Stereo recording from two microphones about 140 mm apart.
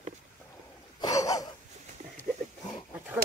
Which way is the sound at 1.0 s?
25° left (ahead or behind).